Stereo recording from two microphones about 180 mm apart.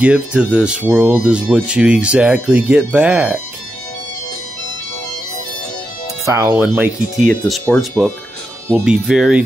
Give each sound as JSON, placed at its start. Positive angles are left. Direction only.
{"t": 0.0, "sound": "speech", "side_deg": -5}
{"t": 6.2, "sound": "speech", "side_deg": -15}